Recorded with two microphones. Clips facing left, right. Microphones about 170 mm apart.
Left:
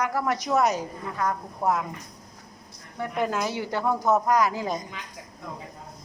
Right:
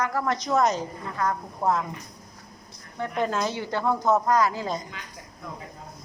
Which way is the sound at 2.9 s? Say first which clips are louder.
Even; 10° left (ahead or behind).